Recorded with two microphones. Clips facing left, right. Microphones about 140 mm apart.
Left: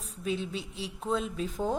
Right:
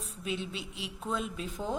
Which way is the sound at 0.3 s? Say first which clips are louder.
Left 4 dB; 40° left (ahead or behind).